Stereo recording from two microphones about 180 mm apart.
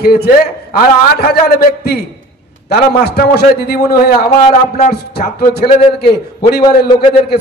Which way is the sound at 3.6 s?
60° left (ahead or behind).